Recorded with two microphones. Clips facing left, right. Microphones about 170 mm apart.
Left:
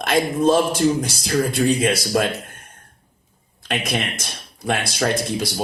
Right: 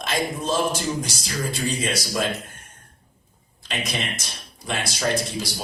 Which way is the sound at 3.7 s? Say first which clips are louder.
Left 5 dB; 55° left (ahead or behind).